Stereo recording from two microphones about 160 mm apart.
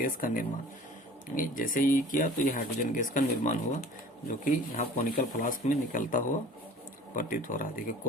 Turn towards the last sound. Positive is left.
turn(degrees=55)  # may be behind; listen again after turning